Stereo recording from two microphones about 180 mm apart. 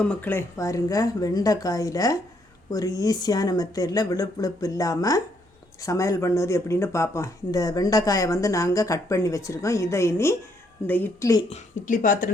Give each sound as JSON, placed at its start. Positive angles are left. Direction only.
{"t": 0.0, "sound": "speech", "side_deg": 10}
{"t": 11.4, "sound": "speech", "side_deg": 40}